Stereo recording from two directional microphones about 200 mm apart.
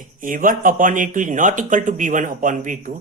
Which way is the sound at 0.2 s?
40° right (ahead or behind).